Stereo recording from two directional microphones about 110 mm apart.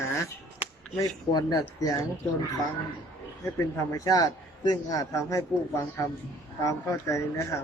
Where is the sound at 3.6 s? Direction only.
30° left (ahead or behind).